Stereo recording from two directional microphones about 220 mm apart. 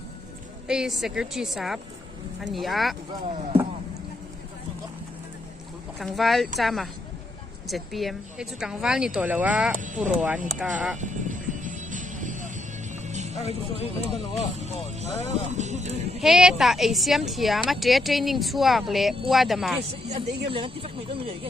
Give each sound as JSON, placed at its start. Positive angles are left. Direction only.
{"t": 0.7, "sound": "speech", "side_deg": 0}
{"t": 3.1, "sound": "speech", "side_deg": -20}
{"t": 6.0, "sound": "speech", "side_deg": 0}
{"t": 9.8, "sound": "speech", "side_deg": -35}
{"t": 10.6, "sound": "speech", "side_deg": -5}
{"t": 11.0, "sound": "music", "side_deg": -35}
{"t": 13.3, "sound": "speech", "side_deg": 30}
{"t": 14.5, "sound": "speech", "side_deg": -30}
{"t": 16.2, "sound": "speech", "side_deg": 0}
{"t": 20.1, "sound": "speech", "side_deg": -25}